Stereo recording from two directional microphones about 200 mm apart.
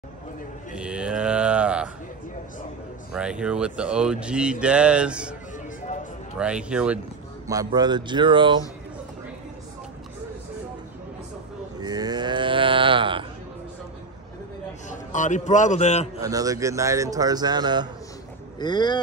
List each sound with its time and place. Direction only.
0.7 s speech: 5° right (ahead or behind)
3.1 s speech: 5° right (ahead or behind)
6.3 s speech: 5° right (ahead or behind)
7.4 s speech: 20° right (ahead or behind)
11.8 s livestock: 20° right (ahead or behind)
14.9 s a man's voice: 40° left (ahead or behind)
16.2 s speech: 15° right (ahead or behind)
18.6 s speech: 20° left (ahead or behind)